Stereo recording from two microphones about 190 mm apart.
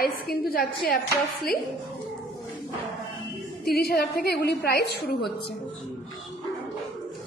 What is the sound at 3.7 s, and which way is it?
A woman's voice, 55° left (ahead or behind).